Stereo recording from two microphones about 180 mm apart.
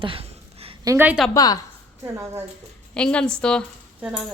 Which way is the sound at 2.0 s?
15° right (ahead or behind).